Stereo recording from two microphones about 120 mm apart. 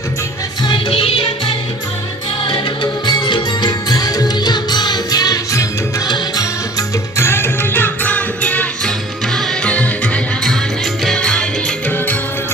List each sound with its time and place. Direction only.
0.7 s music: 50° left (ahead or behind)
2.5 s music: 40° left (ahead or behind); by 11.9 s 5° left (ahead or behind)